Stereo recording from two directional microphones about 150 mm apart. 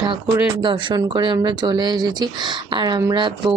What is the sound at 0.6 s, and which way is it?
Speech, 30° right (ahead or behind).